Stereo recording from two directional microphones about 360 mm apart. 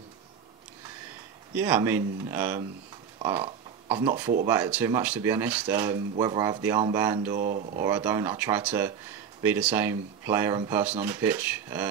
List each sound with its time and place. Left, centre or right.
1.5 s speech: centre
7.3 s speech: right
7.8 s speech: centre